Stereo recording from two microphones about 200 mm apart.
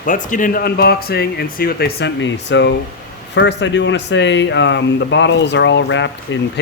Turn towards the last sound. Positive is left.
turn(degrees=65)  # may be behind; listen again after turning